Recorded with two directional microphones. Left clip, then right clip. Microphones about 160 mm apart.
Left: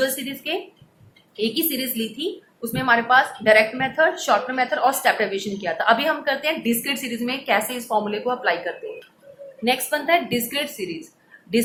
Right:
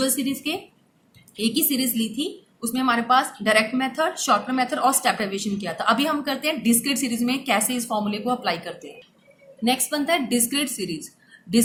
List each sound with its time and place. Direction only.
0.0 s a woman's voice: 25° right (ahead or behind)